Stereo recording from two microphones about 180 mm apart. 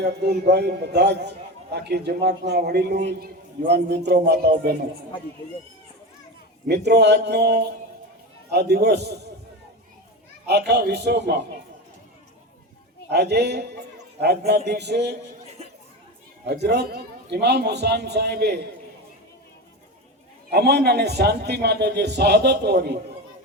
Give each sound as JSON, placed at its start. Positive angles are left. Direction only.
{"t": 0.0, "sound": "a man's voice", "side_deg": -70}
{"t": 6.7, "sound": "a man's voice", "side_deg": -70}
{"t": 10.5, "sound": "a man's voice", "side_deg": -65}
{"t": 13.1, "sound": "a man's voice", "side_deg": -70}
{"t": 16.5, "sound": "a man's voice", "side_deg": -65}
{"t": 20.5, "sound": "a man's voice", "side_deg": -65}